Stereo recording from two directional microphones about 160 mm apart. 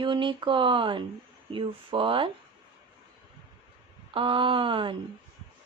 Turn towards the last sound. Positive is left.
turn(degrees=-30)  # may be behind; listen again after turning